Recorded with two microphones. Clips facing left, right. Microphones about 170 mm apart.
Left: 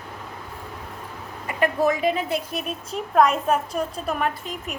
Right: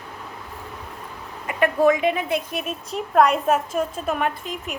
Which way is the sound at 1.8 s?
35° left (ahead or behind).